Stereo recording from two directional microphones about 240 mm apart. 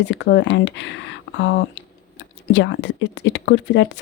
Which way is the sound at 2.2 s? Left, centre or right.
Left.